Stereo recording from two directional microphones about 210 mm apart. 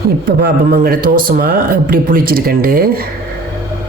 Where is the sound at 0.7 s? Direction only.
45° right (ahead or behind).